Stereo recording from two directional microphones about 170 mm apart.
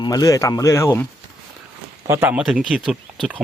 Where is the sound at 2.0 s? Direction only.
15° right (ahead or behind).